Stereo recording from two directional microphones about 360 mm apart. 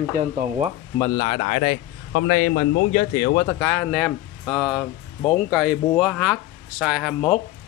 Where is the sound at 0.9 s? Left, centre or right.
Centre.